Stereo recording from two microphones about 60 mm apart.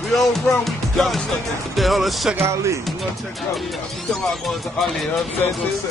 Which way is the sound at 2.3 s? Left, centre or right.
Right.